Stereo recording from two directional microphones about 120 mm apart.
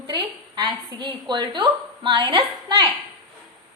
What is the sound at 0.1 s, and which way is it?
A woman's voice, 35° right (ahead or behind).